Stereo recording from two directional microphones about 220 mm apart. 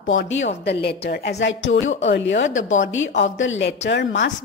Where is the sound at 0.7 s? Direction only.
50° left (ahead or behind).